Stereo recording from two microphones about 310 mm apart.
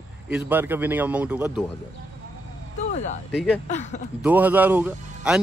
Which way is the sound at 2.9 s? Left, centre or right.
Left.